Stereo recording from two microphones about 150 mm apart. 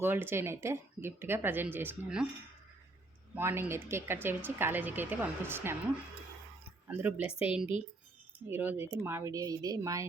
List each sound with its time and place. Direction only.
0.0 s a woman's voice: 15° right (ahead or behind)
3.3 s a woman's voice: 15° right (ahead or behind)
6.8 s a woman's voice: 15° right (ahead or behind)